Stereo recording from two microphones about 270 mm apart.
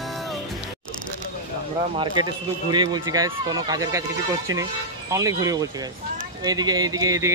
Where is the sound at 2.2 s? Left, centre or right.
Centre.